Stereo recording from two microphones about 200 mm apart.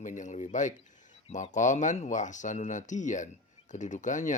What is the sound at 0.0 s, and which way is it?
Speech, 40° left (ahead or behind).